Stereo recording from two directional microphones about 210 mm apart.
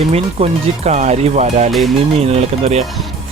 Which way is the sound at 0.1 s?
30° right (ahead or behind).